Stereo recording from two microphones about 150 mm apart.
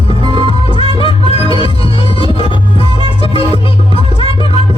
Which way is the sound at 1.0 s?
40° left (ahead or behind).